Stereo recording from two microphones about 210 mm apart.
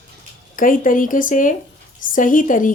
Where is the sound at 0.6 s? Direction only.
40° left (ahead or behind).